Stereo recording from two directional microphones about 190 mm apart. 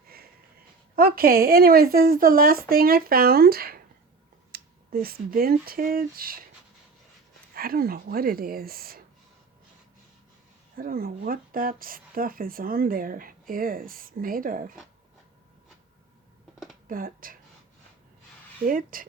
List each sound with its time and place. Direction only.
0.9 s speech: 50° right (ahead or behind)
7.5 s speech: 50° right (ahead or behind)
10.8 s speech: 50° right (ahead or behind)
16.9 s speech: 50° right (ahead or behind)
18.6 s speech: 45° right (ahead or behind)